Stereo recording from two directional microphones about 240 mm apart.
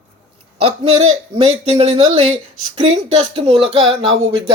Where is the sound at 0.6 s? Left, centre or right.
Right.